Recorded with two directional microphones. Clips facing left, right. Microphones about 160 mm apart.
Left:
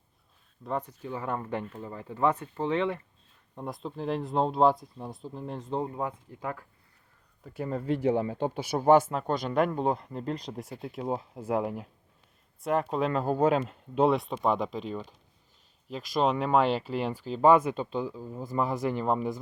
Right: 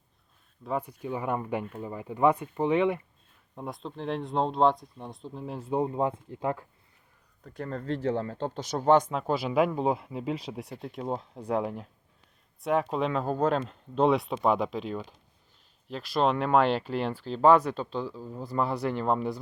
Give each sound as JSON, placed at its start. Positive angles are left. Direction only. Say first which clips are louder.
{"t": 0.6, "sound": "speech", "louder": "right 1 dB", "side_deg": -5}
{"t": 3.5, "sound": "speech", "louder": "left 1 dB", "side_deg": 0}
{"t": 5.8, "sound": "speech", "louder": "right 5 dB", "side_deg": -25}
{"t": 7.4, "sound": "speech", "louder": "left 3 dB", "side_deg": 5}
{"t": 9.2, "sound": "speech", "louder": "right 1 dB", "side_deg": -5}